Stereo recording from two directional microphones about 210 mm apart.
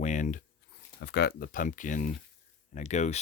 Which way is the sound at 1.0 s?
50° left (ahead or behind).